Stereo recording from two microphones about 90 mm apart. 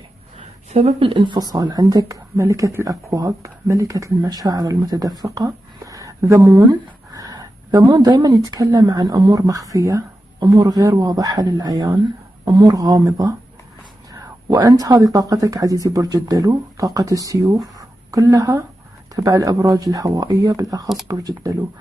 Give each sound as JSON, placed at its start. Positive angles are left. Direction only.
{"t": 0.9, "sound": "a woman's voice", "side_deg": -75}
{"t": 2.4, "sound": "speech", "side_deg": -30}
{"t": 10.4, "sound": "speech", "side_deg": -55}
{"t": 10.8, "sound": "a woman's voice", "side_deg": -45}
{"t": 14.1, "sound": "a sound", "side_deg": -45}
{"t": 14.9, "sound": "speech", "side_deg": -45}
{"t": 17.7, "sound": "a sound", "side_deg": -40}
{"t": 19.3, "sound": "a woman's voice", "side_deg": -35}